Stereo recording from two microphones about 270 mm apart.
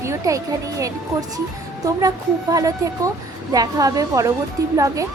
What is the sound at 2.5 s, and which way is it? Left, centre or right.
Speech, centre.